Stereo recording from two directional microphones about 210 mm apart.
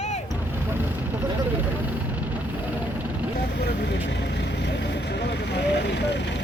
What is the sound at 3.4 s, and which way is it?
Vehicle, 50° left (ahead or behind).